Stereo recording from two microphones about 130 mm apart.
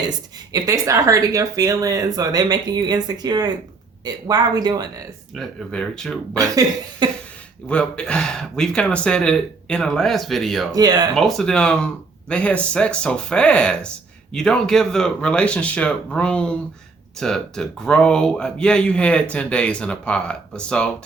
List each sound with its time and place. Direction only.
0.1 s speech: 30° right (ahead or behind)
5.3 s speech: 5° left (ahead or behind)
6.3 s speech: 25° right (ahead or behind)
7.7 s speech: 10° left (ahead or behind)
10.7 s speech: 30° right (ahead or behind)
11.1 s speech: 5° left (ahead or behind)